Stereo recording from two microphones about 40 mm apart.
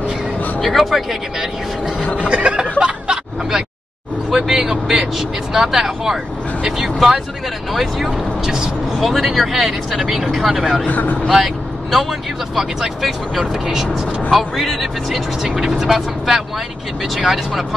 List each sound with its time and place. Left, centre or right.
0.6 s speech: centre
1.4 s speech: centre
2.1 s snicker: right
4.3 s speech: centre
10.9 s speech: left
11.2 s speech: centre